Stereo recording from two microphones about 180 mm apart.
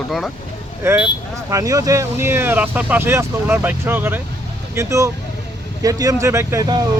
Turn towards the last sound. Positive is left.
turn(degrees=-20)  # may be behind; listen again after turning